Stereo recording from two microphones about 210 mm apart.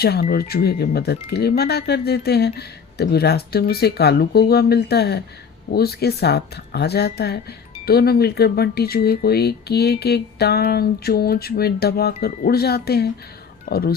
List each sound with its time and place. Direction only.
0.0 s speech: 50° left (ahead or behind)